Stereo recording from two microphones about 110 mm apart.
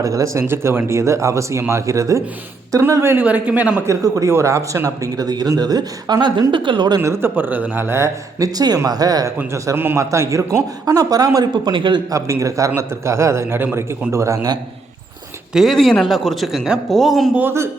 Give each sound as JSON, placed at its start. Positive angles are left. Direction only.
{"t": 0.0, "sound": "speech", "side_deg": -30}
{"t": 3.8, "sound": "speech", "side_deg": -30}
{"t": 7.0, "sound": "speech", "side_deg": -20}
{"t": 9.7, "sound": "speech", "side_deg": -20}
{"t": 11.7, "sound": "a man's voice", "side_deg": -45}
{"t": 12.1, "sound": "speech", "side_deg": -30}
{"t": 15.5, "sound": "a man's voice", "side_deg": 0}
{"t": 17.3, "sound": "speech", "side_deg": -20}